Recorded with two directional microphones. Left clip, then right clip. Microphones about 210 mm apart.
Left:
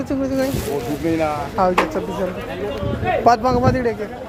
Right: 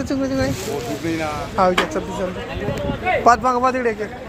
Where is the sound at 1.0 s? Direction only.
45° left (ahead or behind).